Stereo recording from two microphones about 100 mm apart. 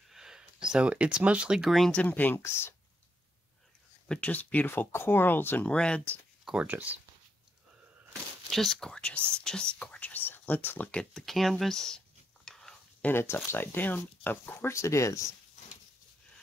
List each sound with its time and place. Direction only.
0.1 s speech: 5° right (ahead or behind)
2.0 s speech: 15° left (ahead or behind)
4.1 s speech: 15° left (ahead or behind)
6.4 s speech: 10° right (ahead or behind)
8.5 s speech: centre (ahead or behind)
12.4 s stir: 5° left (ahead or behind)
13.0 s speech: 25° left (ahead or behind)